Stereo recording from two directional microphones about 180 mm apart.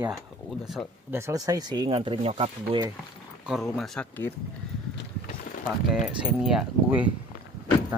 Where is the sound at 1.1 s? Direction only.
15° right (ahead or behind); by 2.8 s 30° right (ahead or behind).